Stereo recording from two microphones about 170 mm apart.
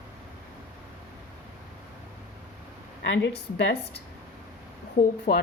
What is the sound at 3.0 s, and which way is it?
Speech, 90° left.